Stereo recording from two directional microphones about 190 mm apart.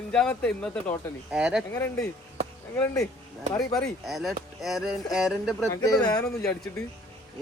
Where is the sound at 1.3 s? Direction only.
5° right (ahead or behind).